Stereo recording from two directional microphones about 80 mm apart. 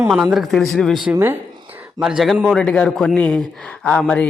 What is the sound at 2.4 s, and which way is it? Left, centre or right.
A man's voice, centre.